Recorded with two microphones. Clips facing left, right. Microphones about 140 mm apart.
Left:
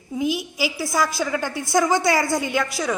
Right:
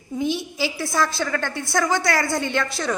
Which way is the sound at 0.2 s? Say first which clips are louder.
Left 1 dB; 5° left (ahead or behind).